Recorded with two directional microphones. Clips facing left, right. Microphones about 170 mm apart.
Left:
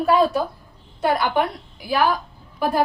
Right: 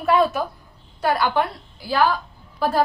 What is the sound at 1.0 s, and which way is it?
A woman's voice, 20° left (ahead or behind).